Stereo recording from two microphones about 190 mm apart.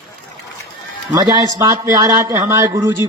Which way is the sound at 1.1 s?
20° right (ahead or behind).